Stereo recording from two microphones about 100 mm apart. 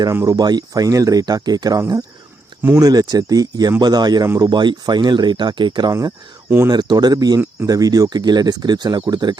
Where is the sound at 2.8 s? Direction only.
40° right (ahead or behind).